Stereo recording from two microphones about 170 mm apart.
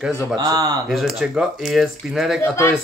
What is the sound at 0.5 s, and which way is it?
Speech, 20° right (ahead or behind).